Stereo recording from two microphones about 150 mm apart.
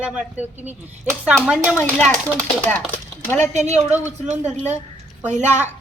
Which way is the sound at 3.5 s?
50° right (ahead or behind).